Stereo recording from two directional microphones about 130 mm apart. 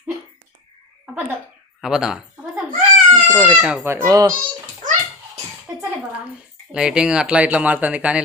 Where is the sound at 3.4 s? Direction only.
5° right (ahead or behind).